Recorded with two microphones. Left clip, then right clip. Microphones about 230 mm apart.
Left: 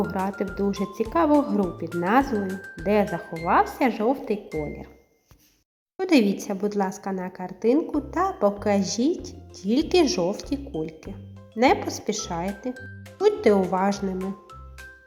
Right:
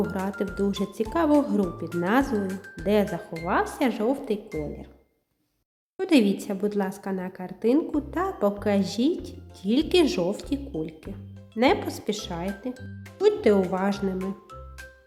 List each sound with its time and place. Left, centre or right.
0.0 s speech: centre
6.0 s speech: centre
11.8 s a woman's voice: centre
12.0 s speech: centre